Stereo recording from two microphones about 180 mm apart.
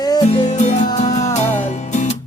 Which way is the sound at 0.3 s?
40° left (ahead or behind).